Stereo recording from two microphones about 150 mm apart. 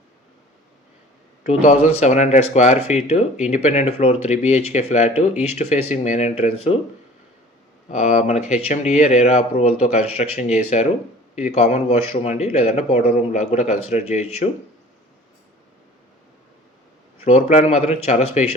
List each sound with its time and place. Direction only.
1.5 s speech: 50° left (ahead or behind)
7.9 s speech: 50° left (ahead or behind)
17.2 s speech: 45° left (ahead or behind)